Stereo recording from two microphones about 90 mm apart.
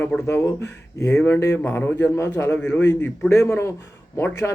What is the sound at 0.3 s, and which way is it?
Speech, 30° left (ahead or behind).